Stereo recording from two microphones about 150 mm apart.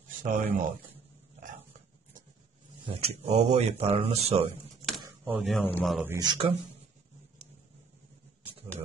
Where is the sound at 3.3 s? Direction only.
50° right (ahead or behind).